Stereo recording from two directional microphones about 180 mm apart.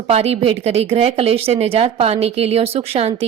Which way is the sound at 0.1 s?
35° right (ahead or behind).